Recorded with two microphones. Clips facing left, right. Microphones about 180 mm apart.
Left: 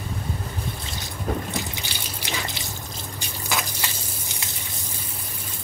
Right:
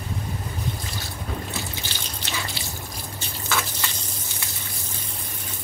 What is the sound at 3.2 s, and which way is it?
Drip, 15° left (ahead or behind).